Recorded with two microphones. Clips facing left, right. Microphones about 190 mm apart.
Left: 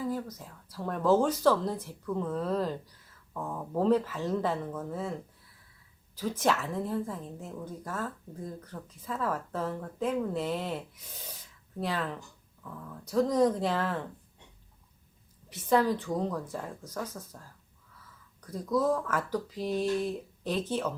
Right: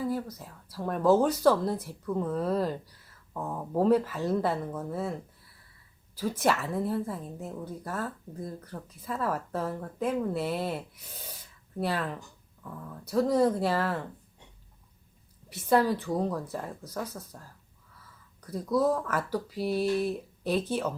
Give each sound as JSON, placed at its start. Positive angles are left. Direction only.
{"t": 0.1, "sound": "speech", "side_deg": -10}
{"t": 6.4, "sound": "speech", "side_deg": -10}
{"t": 13.1, "sound": "speech", "side_deg": -10}
{"t": 15.4, "sound": "speech", "side_deg": -10}
{"t": 18.5, "sound": "speech", "side_deg": -10}